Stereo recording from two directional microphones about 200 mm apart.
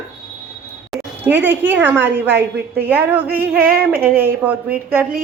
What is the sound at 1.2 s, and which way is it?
A woman's voice, 10° right (ahead or behind).